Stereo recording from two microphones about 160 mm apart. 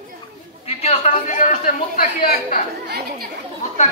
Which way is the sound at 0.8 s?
40° left (ahead or behind).